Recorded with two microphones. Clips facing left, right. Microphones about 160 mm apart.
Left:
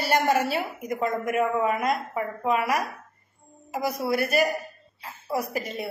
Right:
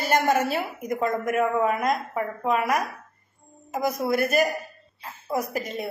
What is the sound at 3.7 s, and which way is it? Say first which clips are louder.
A woman's voice: right 2 dB; 50° right (ahead or behind).